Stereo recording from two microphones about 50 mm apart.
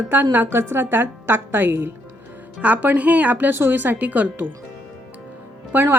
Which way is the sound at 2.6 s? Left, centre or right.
Right.